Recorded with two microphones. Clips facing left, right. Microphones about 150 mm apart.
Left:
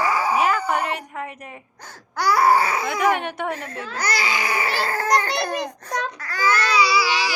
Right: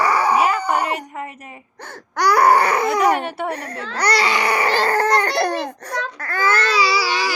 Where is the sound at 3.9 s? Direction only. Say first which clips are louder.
Right 6 dB; 65° right (ahead or behind).